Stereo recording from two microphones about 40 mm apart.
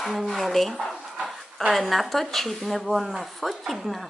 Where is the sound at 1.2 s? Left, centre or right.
Centre.